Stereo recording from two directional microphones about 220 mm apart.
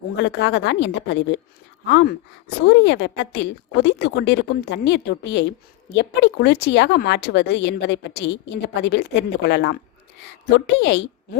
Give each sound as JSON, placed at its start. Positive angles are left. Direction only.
{"t": 0.2, "sound": "speech", "side_deg": 50}